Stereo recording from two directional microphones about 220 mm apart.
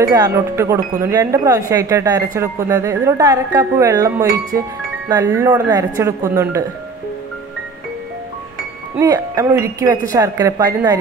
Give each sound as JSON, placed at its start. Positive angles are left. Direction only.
{"t": 0.0, "sound": "speech", "side_deg": -15}
{"t": 9.0, "sound": "speech", "side_deg": -15}